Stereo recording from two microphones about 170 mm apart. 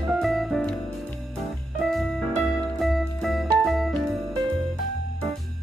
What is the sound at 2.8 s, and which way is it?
Music, centre (ahead or behind).